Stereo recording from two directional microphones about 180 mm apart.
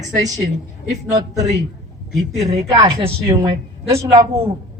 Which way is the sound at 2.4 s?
35° right (ahead or behind).